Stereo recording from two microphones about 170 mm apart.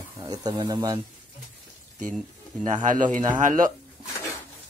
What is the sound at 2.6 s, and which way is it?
Speech, 50° right (ahead or behind).